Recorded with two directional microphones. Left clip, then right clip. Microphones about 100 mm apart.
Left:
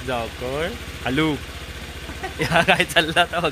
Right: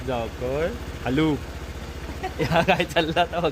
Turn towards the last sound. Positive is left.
turn(degrees=10)  # may be behind; listen again after turning